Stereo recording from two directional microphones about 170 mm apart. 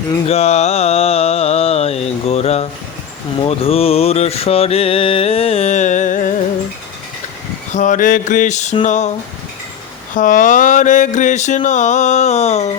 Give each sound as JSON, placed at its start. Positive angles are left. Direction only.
{"t": 0.3, "sound": "mantra", "side_deg": 40}
{"t": 7.7, "sound": "mantra", "side_deg": 45}
{"t": 10.2, "sound": "mantra", "side_deg": 50}